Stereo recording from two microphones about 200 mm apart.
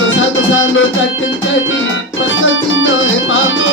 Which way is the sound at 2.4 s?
70° left (ahead or behind).